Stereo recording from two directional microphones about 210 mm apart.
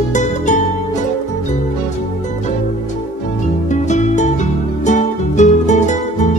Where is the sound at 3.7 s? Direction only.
35° left (ahead or behind).